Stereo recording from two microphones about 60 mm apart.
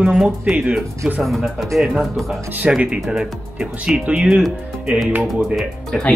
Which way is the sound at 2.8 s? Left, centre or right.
Centre.